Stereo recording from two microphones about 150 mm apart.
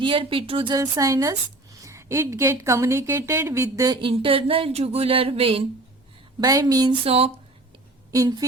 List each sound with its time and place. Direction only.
0.0 s a woman's voice: 35° right (ahead or behind); by 3.9 s 20° right (ahead or behind)
4.0 s speech: 35° right (ahead or behind)
6.4 s a woman's voice: 25° right (ahead or behind)
7.0 s speech: 40° right (ahead or behind)
8.1 s a woman's voice: 25° right (ahead or behind)